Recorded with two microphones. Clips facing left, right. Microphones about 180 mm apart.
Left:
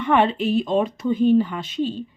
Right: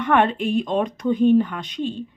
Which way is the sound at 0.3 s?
50° right (ahead or behind).